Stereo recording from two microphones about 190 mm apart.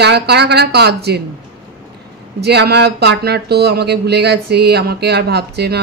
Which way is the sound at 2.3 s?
60° right (ahead or behind).